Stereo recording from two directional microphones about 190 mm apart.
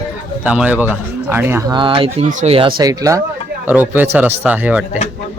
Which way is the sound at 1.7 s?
25° right (ahead or behind).